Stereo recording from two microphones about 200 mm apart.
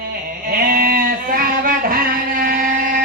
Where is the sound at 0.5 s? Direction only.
45° right (ahead or behind).